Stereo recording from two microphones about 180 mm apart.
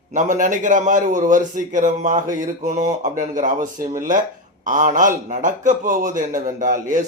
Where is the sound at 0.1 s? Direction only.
45° right (ahead or behind).